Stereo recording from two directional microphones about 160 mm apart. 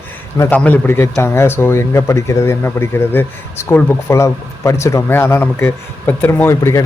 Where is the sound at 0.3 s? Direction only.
15° left (ahead or behind).